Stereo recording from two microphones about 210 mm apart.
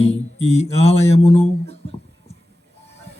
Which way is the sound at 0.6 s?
30° left (ahead or behind).